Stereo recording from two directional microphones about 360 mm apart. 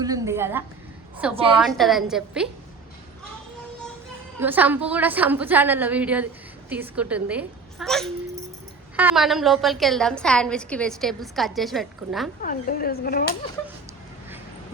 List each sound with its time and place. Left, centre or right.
0.0 s a sound: centre
1.2 s a woman's voice: centre
4.4 s a woman's voice: centre
12.4 s speech: left